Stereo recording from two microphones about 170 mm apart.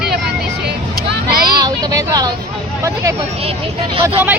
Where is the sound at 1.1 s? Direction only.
60° right (ahead or behind).